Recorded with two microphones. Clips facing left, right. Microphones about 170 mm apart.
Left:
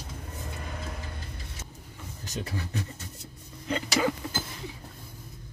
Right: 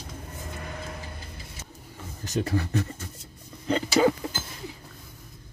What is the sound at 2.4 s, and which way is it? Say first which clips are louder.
Speech: right 7 dB; 50° right (ahead or behind).